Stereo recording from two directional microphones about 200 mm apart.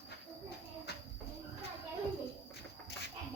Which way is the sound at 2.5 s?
55° left (ahead or behind).